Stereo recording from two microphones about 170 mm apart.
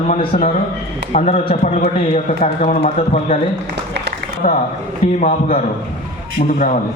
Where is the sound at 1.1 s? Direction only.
40° left (ahead or behind).